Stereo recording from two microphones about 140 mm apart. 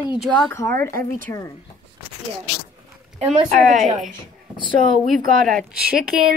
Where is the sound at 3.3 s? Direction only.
60° right (ahead or behind).